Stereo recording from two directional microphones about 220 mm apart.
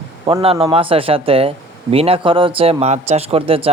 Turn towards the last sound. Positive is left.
turn(degrees=-25)  # may be behind; listen again after turning